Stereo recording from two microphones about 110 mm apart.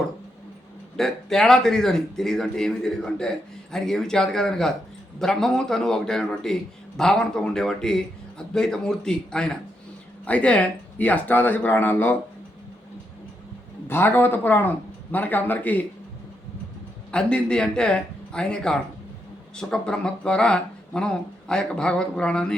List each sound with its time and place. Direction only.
0.9 s a man's voice: 5° left (ahead or behind)
13.8 s speech: 20° left (ahead or behind)
17.1 s speech: 10° left (ahead or behind)